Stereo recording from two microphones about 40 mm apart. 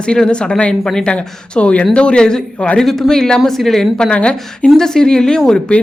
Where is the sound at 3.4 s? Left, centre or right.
Centre.